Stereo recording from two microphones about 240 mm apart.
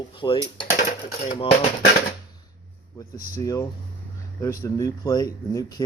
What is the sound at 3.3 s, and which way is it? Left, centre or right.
Speech, centre.